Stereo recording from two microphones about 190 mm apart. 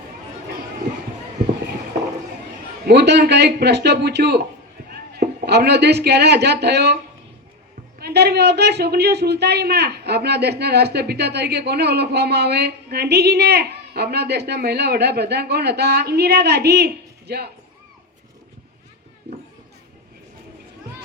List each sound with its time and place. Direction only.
2.8 s a man's voice: 65° right (ahead or behind)
7.9 s a man's voice: 60° right (ahead or behind)